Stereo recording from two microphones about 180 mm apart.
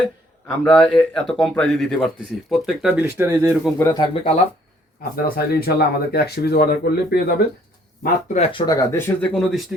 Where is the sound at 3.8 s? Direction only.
20° left (ahead or behind).